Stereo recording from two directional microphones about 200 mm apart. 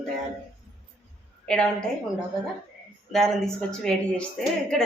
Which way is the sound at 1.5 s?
5° left (ahead or behind).